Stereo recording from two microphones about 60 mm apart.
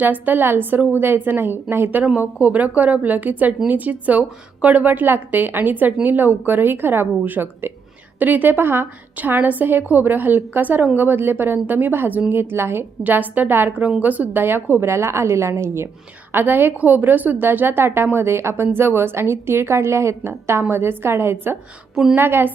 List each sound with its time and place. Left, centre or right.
0.0 s a woman's voice: right
13.0 s a woman's voice: right
14.4 s a woman's voice: right
16.3 s a woman's voice: right